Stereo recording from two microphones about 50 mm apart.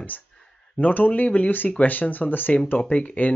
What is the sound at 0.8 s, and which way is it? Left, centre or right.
Speech, left.